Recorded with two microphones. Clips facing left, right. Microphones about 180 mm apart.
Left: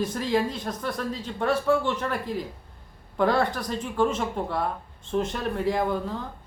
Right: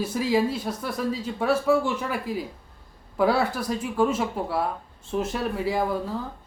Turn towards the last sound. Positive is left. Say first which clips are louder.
# right 1 dB
turn(degrees=-5)  # may be behind; listen again after turning